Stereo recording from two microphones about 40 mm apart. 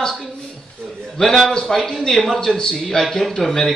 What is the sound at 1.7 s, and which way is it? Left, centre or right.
Speech, centre.